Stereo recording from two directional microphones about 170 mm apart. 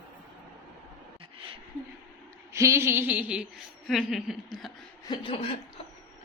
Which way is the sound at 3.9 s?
Centre (ahead or behind).